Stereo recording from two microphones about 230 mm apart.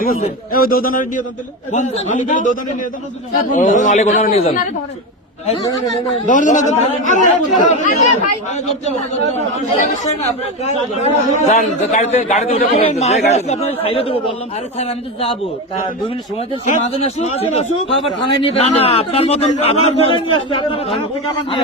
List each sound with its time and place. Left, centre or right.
0.0 s speech: left
6.2 s speech: left
10.6 s a man's voice: left